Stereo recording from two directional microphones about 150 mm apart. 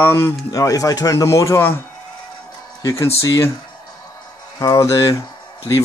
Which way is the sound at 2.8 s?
20° left (ahead or behind).